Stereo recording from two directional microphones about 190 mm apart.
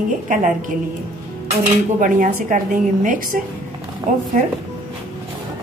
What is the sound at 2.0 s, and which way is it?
A woman's voice, 45° right (ahead or behind).